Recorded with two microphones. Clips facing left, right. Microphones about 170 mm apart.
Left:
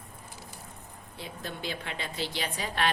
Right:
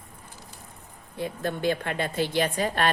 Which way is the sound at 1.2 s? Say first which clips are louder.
Right 10 dB; 55° right (ahead or behind).